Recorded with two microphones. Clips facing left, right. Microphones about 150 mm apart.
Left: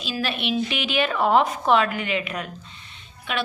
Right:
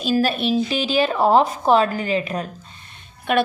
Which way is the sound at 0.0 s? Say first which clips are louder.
Right 8 dB; 45° right (ahead or behind).